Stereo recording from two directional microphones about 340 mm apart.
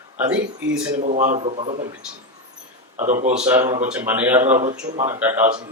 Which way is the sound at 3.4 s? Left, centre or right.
Centre.